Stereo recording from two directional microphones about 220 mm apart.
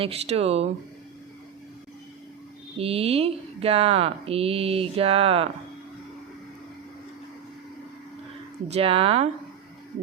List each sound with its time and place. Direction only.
0.0 s speech: 25° right (ahead or behind)
2.7 s speech: 25° right (ahead or behind)
8.6 s speech: 25° right (ahead or behind)